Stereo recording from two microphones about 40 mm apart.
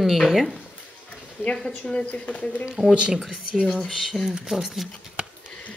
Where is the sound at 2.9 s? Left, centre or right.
Right.